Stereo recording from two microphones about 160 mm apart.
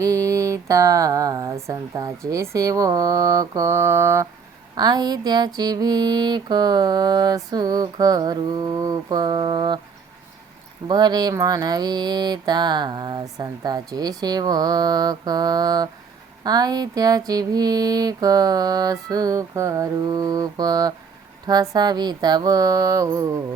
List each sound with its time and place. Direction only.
0.0 s mantra: 20° right (ahead or behind)
10.8 s mantra: 25° right (ahead or behind)